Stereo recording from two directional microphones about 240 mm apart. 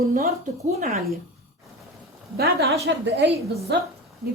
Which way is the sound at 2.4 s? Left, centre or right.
Right.